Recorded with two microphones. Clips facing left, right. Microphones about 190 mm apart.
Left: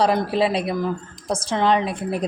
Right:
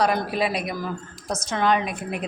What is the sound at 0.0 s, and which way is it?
A woman's voice, 25° left (ahead or behind).